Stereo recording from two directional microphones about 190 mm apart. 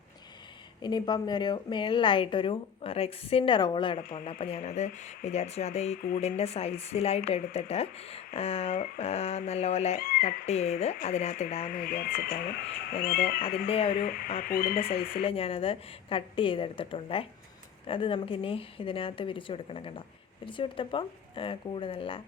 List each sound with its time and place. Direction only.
0.8 s a woman's voice: 20° left (ahead or behind); by 11.6 s 35° left (ahead or behind)
11.6 s speech: 50° left (ahead or behind)
13.4 s speech: 30° left (ahead or behind)
14.0 s speech: 50° left (ahead or behind)
14.8 s a woman's voice: 30° left (ahead or behind)